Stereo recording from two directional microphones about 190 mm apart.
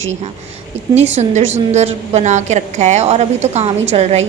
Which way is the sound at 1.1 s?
35° right (ahead or behind).